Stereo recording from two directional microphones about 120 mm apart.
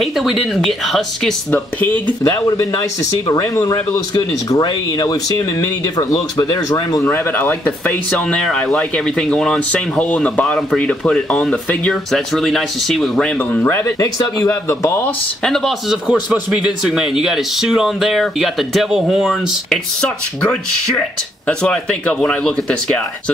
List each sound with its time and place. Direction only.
0.0 s speech: centre (ahead or behind)
1.5 s speech: 15° left (ahead or behind)
2.2 s speech: 30° left (ahead or behind)
7.3 s speech: 15° left (ahead or behind)
15.4 s speech: 5° left (ahead or behind)